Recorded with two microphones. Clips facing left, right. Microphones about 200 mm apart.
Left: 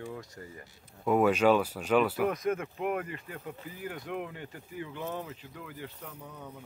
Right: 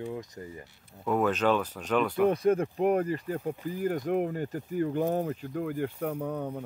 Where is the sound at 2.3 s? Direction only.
30° right (ahead or behind).